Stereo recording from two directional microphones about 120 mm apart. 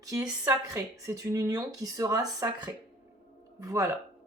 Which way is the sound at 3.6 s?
25° right (ahead or behind).